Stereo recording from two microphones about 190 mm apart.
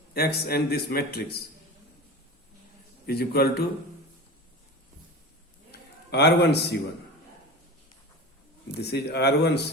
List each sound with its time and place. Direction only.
0.1 s speech: 55° left (ahead or behind)
3.1 s speech: 55° left (ahead or behind)
5.7 s a sound: 60° left (ahead or behind)
8.8 s speech: 60° left (ahead or behind)